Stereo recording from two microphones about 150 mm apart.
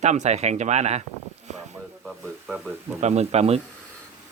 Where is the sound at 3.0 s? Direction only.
45° right (ahead or behind).